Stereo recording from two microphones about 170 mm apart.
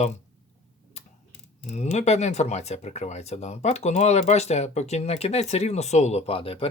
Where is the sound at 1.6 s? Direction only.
40° left (ahead or behind).